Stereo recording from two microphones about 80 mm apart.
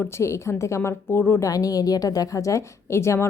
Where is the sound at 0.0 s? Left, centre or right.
Left.